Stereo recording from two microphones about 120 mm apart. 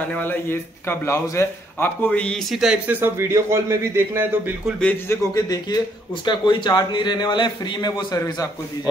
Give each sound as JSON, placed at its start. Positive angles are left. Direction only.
{"t": 0.1, "sound": "speech", "side_deg": 15}
{"t": 2.5, "sound": "speech", "side_deg": -5}
{"t": 3.0, "sound": "speech", "side_deg": -20}
{"t": 4.7, "sound": "a man's voice", "side_deg": 15}